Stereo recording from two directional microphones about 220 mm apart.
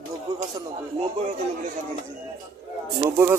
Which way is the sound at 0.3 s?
15° right (ahead or behind).